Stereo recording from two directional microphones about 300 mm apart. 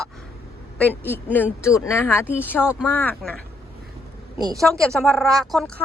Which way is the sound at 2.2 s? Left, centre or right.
Centre.